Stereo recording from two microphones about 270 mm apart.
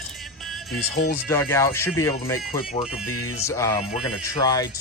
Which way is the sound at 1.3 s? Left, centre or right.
Centre.